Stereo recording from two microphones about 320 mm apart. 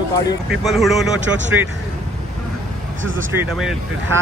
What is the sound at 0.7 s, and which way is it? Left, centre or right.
Speech, centre.